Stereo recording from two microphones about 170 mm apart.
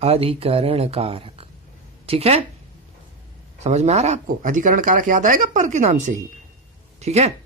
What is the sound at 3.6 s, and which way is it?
Speech, 40° right (ahead or behind).